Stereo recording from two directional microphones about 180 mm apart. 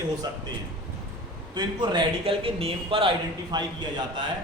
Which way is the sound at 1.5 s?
25° right (ahead or behind).